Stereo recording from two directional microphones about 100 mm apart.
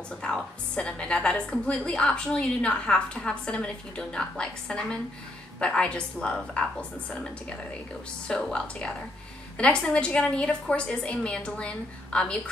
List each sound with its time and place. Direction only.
0.2 s a woman's voice: 10° left (ahead or behind)
8.3 s a woman's voice: 5° left (ahead or behind)